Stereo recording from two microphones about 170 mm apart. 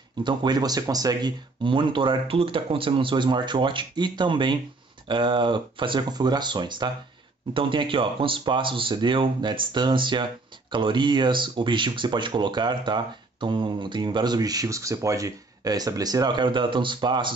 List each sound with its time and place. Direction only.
0.2 s speech: 25° right (ahead or behind)